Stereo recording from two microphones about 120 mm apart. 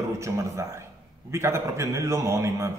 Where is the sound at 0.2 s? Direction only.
25° right (ahead or behind).